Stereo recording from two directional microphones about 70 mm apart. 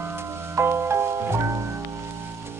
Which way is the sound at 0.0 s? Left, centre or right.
Right.